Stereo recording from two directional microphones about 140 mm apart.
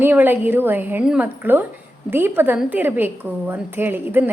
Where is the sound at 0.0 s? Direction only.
15° right (ahead or behind).